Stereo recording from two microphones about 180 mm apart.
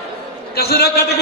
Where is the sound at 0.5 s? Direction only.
60° left (ahead or behind).